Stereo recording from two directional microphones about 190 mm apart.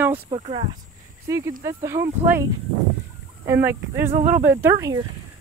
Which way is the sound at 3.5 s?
10° right (ahead or behind).